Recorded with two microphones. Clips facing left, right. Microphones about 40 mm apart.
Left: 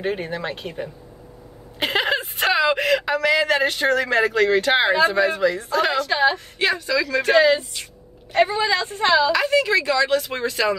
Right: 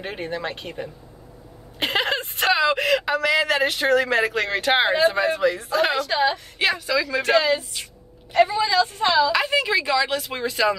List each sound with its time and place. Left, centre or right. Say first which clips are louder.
0.0 s speech: left 3 dB; centre
1.8 s whimper: left 2 dB; centre
3.0 s speech: left 1 dB; centre
6.0 s a woman's voice: left 2 dB; left
6.6 s speech: left 1 dB; centre
7.3 s a woman's voice: left 6 dB; left
9.3 s speech: left 2 dB; centre